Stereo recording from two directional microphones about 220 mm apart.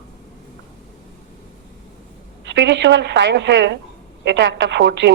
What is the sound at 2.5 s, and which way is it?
A woman's voice, 55° right (ahead or behind).